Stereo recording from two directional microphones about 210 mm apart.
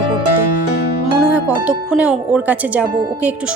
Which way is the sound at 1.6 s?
5° right (ahead or behind).